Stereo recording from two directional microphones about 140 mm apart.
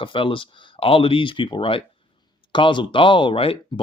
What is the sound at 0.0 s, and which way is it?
Speech, 40° left (ahead or behind).